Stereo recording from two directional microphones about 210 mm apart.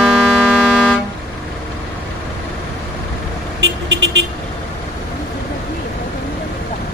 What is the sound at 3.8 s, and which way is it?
Vehicle, 55° right (ahead or behind).